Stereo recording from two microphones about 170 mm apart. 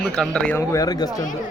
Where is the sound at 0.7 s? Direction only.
20° left (ahead or behind).